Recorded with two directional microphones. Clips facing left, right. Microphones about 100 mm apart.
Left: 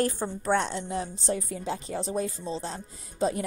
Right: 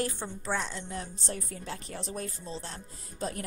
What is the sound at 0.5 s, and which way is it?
Speech, 70° left (ahead or behind).